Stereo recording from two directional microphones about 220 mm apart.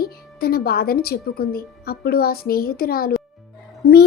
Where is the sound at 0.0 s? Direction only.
45° left (ahead or behind).